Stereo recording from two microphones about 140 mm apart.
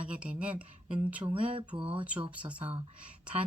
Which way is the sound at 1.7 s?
40° right (ahead or behind).